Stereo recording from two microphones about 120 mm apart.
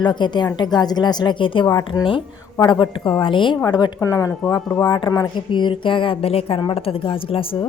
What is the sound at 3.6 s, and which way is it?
A woman's voice, 35° left (ahead or behind).